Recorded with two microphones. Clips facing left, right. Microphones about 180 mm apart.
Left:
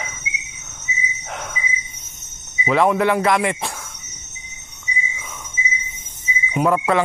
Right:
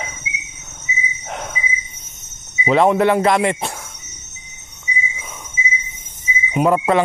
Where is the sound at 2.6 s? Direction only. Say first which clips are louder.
Right 3 dB; 25° right (ahead or behind).